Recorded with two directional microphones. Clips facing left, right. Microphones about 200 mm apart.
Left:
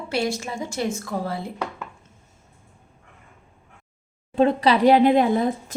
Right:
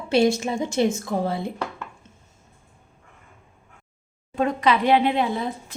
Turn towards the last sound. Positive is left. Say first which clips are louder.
# left 6 dB
turn(degrees=45)  # may be behind; listen again after turning